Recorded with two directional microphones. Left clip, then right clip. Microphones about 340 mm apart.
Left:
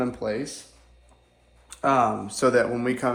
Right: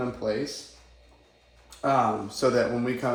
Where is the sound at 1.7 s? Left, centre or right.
Left.